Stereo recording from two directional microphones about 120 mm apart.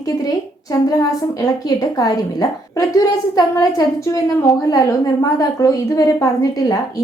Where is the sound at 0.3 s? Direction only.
30° left (ahead or behind).